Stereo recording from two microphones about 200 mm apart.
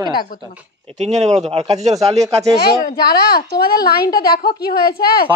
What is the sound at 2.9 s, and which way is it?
A woman's voice, 50° left (ahead or behind).